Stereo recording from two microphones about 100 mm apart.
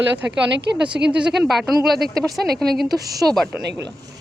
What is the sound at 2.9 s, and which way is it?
Speech, 40° right (ahead or behind).